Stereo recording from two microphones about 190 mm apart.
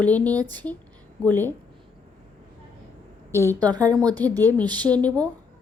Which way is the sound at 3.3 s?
15° left (ahead or behind).